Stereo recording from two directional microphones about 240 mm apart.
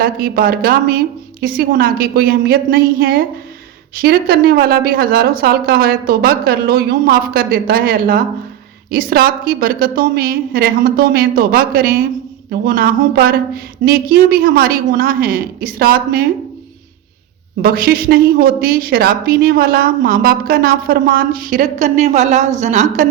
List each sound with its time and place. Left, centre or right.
0.0 s a woman's voice: right
17.6 s a woman's voice: right